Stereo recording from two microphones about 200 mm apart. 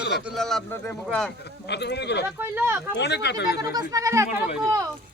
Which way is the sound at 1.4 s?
60° left (ahead or behind).